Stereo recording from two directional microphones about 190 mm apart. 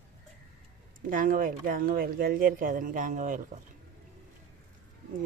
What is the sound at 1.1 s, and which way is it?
Speech, 45° right (ahead or behind).